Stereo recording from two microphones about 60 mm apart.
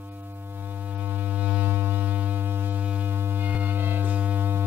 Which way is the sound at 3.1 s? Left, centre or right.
Right.